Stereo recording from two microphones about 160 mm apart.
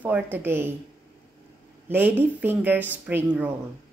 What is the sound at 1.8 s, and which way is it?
Speech, 10° right (ahead or behind).